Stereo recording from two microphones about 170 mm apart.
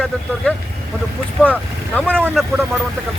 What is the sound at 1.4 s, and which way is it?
Speech, 5° left (ahead or behind).